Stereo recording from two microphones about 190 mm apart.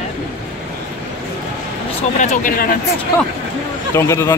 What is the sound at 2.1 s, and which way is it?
Speech, 40° left (ahead or behind).